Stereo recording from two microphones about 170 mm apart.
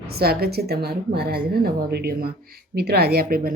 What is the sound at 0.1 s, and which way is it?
A woman's voice, 65° right (ahead or behind).